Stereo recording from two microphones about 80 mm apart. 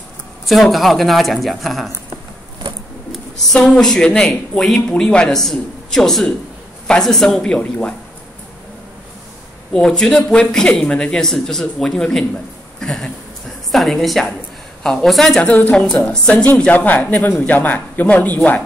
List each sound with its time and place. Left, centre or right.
0.5 s a woman's voice: centre
3.1 s speech: centre
9.7 s a woman's voice: centre
15.4 s speech: centre